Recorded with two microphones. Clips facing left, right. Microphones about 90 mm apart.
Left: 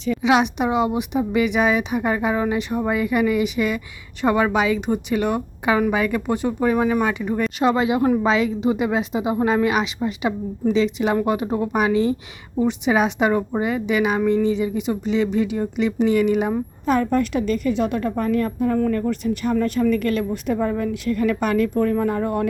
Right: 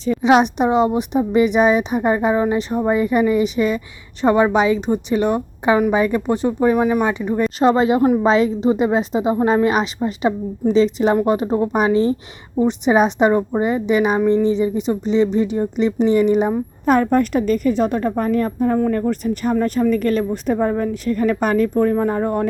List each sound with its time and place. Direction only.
0.0 s a woman's voice: 35° right (ahead or behind); by 7.4 s 20° right (ahead or behind)
7.6 s a woman's voice: 35° right (ahead or behind)
16.8 s a woman's voice: 50° right (ahead or behind); by 22.4 s 30° right (ahead or behind)